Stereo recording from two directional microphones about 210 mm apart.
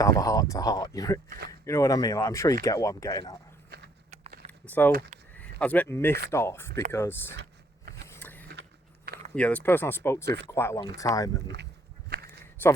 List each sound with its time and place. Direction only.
0.0 s speech: 15° left (ahead or behind)
4.1 s a sound: 35° right (ahead or behind)
4.6 s speech: 10° left (ahead or behind)
4.9 s speech: 40° right (ahead or behind)
5.4 s speech: 5° left (ahead or behind)
8.0 s vehicle: 10° left (ahead or behind)
9.3 s speech: 5° left (ahead or behind)
12.0 s walk: 50° right (ahead or behind)
12.6 s a man's voice: 10° left (ahead or behind)